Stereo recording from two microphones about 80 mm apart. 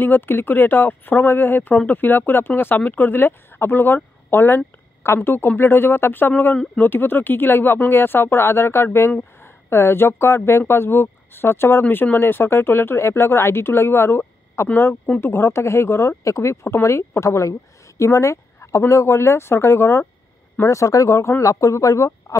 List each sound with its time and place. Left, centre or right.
0.0 s speech: left